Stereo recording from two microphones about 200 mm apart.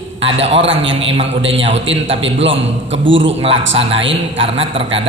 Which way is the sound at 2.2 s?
70° right (ahead or behind).